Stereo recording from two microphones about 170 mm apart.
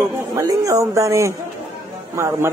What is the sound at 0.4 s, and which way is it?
A man's voice, 20° right (ahead or behind).